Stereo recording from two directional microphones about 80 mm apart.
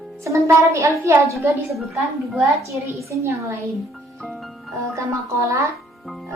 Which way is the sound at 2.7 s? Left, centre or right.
Right.